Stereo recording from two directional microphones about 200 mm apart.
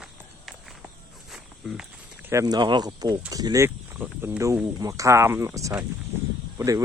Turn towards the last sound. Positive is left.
turn(degrees=-15)  # may be behind; listen again after turning